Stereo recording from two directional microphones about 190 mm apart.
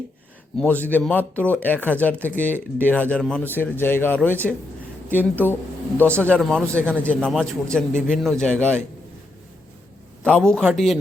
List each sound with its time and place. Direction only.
0.5 s a man's voice: 5° left (ahead or behind)
10.2 s a man's voice: 5° left (ahead or behind)